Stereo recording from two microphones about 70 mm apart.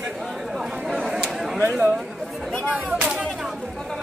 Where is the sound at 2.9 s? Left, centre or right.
Centre.